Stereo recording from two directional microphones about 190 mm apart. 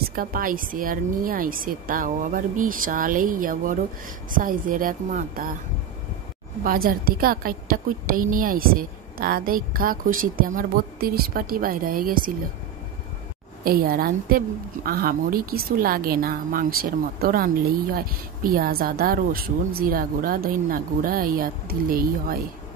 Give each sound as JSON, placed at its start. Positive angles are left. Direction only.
{"t": 0.0, "sound": "a woman's voice", "side_deg": -50}
{"t": 6.6, "sound": "a woman's voice", "side_deg": -50}
{"t": 13.7, "sound": "a woman's voice", "side_deg": -55}